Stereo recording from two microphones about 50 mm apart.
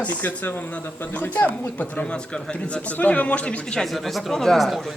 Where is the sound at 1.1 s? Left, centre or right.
Left.